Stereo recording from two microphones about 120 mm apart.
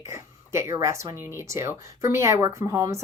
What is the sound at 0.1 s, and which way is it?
Speech, 25° right (ahead or behind).